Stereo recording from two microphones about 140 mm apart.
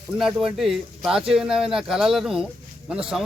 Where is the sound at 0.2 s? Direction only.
Centre (ahead or behind).